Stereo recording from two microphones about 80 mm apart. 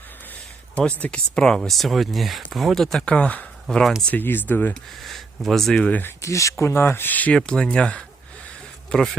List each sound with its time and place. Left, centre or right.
0.8 s speech: centre
1.4 s speech: centre
4.1 s speech: left
4.7 s speech: centre
5.9 s speech: left
6.2 s speech: left
7.3 s speech: centre